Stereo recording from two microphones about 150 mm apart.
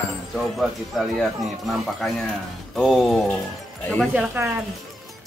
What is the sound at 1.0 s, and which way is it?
Speech, centre (ahead or behind).